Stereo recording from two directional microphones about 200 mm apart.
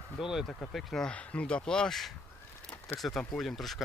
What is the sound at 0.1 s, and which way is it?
Speech, centre (ahead or behind).